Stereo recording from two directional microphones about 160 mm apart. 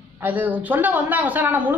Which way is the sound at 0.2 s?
10° right (ahead or behind).